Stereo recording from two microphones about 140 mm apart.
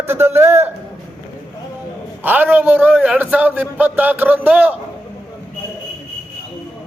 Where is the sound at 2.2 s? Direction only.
15° right (ahead or behind).